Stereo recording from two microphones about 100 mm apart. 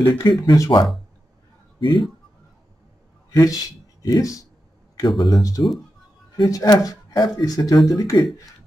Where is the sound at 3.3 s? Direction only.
35° left (ahead or behind).